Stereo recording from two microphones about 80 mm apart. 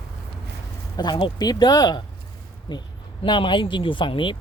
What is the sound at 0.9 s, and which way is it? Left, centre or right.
Speech, left.